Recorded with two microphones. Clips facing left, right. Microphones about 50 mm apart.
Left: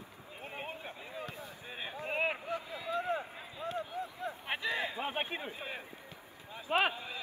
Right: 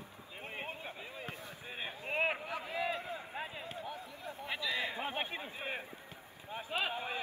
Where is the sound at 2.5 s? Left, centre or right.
Right.